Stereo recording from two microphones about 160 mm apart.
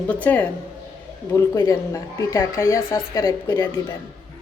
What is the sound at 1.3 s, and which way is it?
Speech, 20° left (ahead or behind).